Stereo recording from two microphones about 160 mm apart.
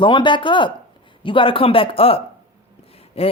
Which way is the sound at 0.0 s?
30° left (ahead or behind).